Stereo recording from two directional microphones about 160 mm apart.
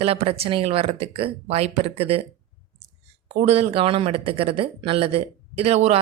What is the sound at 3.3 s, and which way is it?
Speech, 40° right (ahead or behind).